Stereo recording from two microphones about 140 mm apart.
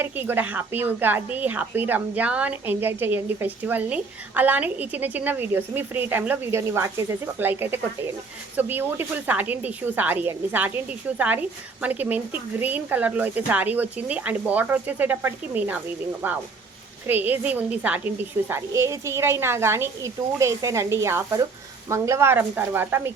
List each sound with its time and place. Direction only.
0.0 s a woman's voice: 15° right (ahead or behind)